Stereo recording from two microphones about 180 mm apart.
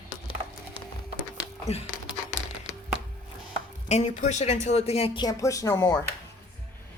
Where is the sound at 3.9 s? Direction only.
40° left (ahead or behind); by 5.9 s 15° left (ahead or behind).